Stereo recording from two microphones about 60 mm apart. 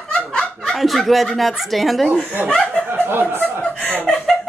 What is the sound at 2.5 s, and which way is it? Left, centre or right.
Speech, centre.